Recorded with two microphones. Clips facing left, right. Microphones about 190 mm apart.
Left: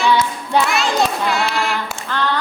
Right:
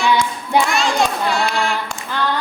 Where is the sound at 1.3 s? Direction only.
Centre (ahead or behind).